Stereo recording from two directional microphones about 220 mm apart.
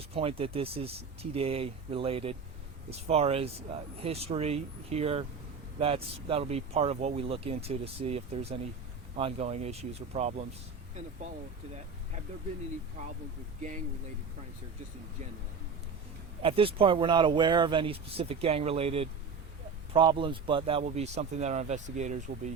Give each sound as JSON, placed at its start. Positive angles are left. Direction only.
{"t": 0.1, "sound": "speech", "side_deg": -25}
{"t": 13.0, "sound": "speech", "side_deg": -35}
{"t": 16.4, "sound": "speech", "side_deg": -25}